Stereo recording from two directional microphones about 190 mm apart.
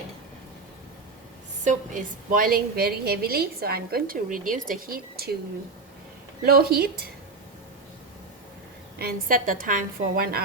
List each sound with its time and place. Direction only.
1.6 s a woman's voice: 45° right (ahead or behind)
6.4 s a woman's voice: 55° right (ahead or behind)
9.0 s a woman's voice: 50° right (ahead or behind)